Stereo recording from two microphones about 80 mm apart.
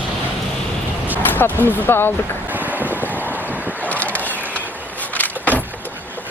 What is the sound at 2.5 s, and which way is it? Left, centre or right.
Boat, right.